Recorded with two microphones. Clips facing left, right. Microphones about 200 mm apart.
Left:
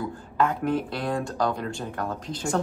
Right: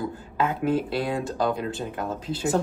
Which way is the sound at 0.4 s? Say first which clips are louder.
Even; 5° right (ahead or behind).